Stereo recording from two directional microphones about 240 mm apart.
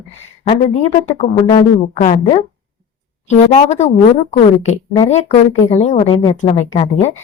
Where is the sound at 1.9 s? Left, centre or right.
Left.